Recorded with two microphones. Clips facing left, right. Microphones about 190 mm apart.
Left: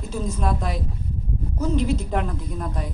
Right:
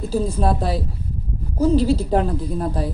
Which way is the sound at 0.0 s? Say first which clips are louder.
Right 6 dB; 35° right (ahead or behind).